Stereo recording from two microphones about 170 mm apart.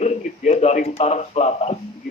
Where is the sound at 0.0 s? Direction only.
40° left (ahead or behind).